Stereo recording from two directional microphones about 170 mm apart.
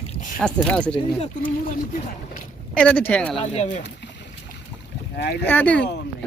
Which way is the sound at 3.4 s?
40° left (ahead or behind).